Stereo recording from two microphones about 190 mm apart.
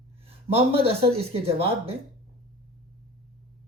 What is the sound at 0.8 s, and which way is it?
Speech, 30° right (ahead or behind).